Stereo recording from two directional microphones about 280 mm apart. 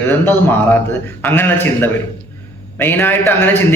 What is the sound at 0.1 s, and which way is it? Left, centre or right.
A man's voice, centre.